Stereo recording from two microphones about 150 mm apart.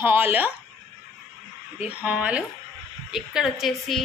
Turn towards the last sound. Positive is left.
turn(degrees=0)  # may be behind; listen again after turning